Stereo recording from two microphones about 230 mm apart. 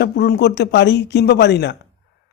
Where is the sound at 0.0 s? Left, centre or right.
Left.